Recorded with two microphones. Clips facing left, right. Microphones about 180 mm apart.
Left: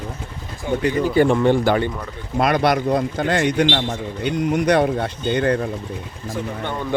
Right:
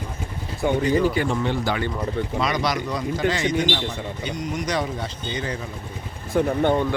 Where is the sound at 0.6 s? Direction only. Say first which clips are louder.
Right 1 dB; 65° right (ahead or behind).